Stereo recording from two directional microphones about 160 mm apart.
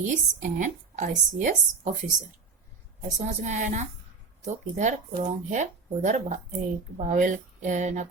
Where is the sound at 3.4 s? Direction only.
50° right (ahead or behind).